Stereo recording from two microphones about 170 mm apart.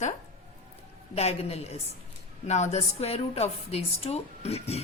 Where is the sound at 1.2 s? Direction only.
40° left (ahead or behind).